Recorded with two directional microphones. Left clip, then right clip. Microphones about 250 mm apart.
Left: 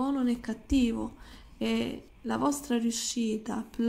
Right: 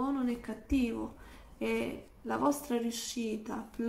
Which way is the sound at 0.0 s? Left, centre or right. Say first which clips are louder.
Left 4 dB; left.